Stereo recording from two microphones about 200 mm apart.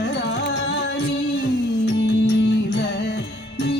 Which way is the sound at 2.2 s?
60° left (ahead or behind).